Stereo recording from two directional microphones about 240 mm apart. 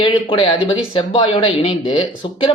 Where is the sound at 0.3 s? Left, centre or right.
Centre.